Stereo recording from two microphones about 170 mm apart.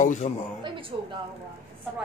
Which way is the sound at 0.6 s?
30° right (ahead or behind).